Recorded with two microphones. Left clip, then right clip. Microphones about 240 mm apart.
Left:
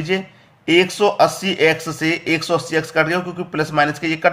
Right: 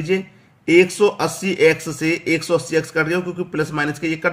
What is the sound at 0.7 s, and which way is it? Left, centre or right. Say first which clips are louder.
Speech: right 1 dB; centre.